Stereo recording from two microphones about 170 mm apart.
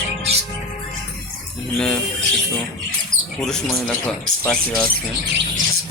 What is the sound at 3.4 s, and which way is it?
Speech, 5° left (ahead or behind).